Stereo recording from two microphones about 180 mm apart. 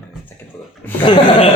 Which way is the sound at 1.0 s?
25° left (ahead or behind).